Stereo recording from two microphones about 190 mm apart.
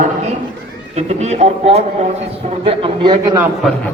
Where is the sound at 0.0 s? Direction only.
40° right (ahead or behind).